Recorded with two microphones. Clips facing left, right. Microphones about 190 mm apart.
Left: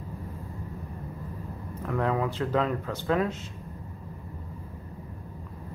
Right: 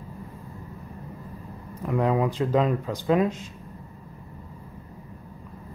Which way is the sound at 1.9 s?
15° right (ahead or behind).